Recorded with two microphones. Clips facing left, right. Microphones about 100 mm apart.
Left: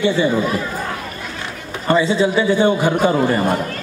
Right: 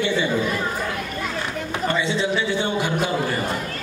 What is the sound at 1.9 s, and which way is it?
Speech, 40° left (ahead or behind).